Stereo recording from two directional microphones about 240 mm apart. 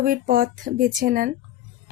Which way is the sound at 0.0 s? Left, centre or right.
Right.